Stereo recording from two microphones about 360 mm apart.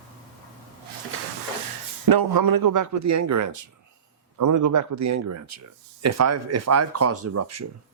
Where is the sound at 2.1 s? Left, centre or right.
Right.